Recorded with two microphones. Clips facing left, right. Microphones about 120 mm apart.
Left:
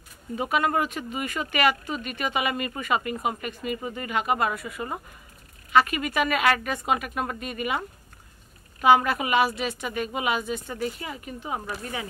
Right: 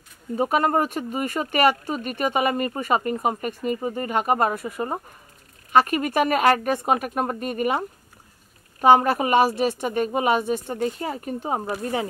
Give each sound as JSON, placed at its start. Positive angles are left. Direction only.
{"t": 0.4, "sound": "speech", "side_deg": -40}
{"t": 8.8, "sound": "speech", "side_deg": -40}